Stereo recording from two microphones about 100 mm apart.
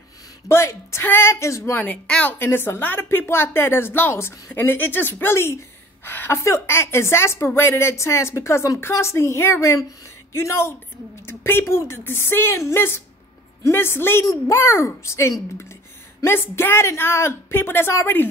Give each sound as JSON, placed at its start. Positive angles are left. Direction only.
{"t": 0.5, "sound": "a woman's voice", "side_deg": 25}
{"t": 1.7, "sound": "a woman's voice", "side_deg": 15}